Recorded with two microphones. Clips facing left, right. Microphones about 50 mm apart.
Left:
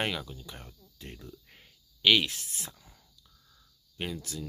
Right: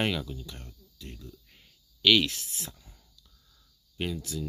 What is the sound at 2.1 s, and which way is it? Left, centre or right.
Speech, centre.